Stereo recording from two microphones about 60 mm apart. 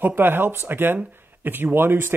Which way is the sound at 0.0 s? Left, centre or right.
Right.